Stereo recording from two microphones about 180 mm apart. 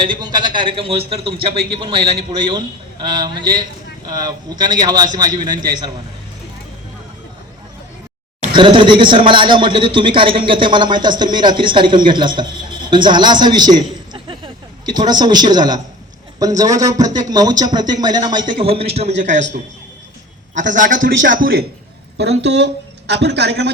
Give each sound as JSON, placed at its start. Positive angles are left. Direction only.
{"t": 0.0, "sound": "a man's voice", "side_deg": -25}
{"t": 8.5, "sound": "a man's voice", "side_deg": -25}
{"t": 20.7, "sound": "a man's voice", "side_deg": -45}
{"t": 21.0, "sound": "a man's voice", "side_deg": -90}
{"t": 21.3, "sound": "a man's voice", "side_deg": -55}
{"t": 22.2, "sound": "speech", "side_deg": -70}